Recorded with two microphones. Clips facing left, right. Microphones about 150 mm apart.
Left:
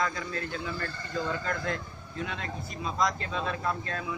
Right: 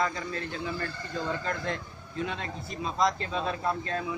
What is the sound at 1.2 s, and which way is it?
A man's voice, 25° right (ahead or behind).